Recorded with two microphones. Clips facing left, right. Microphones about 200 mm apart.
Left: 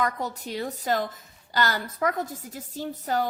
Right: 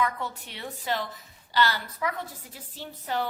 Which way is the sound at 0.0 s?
40° left (ahead or behind).